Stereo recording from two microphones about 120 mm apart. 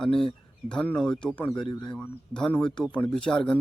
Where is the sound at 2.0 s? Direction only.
5° left (ahead or behind).